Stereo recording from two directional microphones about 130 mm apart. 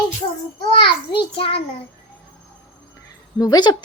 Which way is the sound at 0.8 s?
40° left (ahead or behind).